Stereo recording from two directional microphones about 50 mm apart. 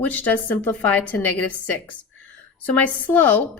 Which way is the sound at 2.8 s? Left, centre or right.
Left.